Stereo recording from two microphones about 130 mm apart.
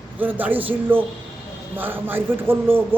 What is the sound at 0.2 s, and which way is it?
A man's voice, 15° right (ahead or behind).